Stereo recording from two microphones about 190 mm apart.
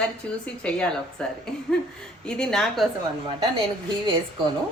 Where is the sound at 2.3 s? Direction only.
5° left (ahead or behind).